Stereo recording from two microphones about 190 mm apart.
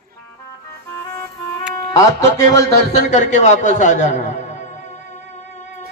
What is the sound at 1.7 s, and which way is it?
Speech, 15° left (ahead or behind).